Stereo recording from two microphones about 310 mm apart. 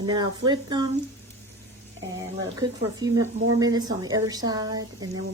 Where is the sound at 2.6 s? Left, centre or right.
Right.